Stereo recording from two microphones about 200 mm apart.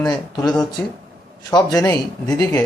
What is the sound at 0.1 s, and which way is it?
A man's voice, 20° left (ahead or behind).